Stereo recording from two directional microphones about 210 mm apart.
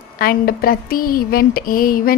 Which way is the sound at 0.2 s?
45° left (ahead or behind).